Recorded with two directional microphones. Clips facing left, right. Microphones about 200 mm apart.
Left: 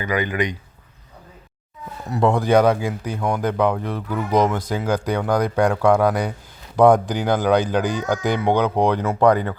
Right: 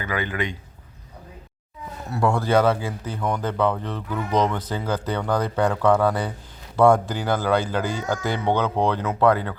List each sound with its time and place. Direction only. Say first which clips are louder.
0.0 s speech: left 4 dB; 15° left (ahead or behind)
2.0 s speech: left 4 dB; 15° left (ahead or behind)